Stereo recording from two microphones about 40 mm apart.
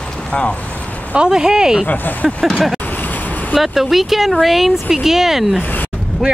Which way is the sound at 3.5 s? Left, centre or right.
Centre.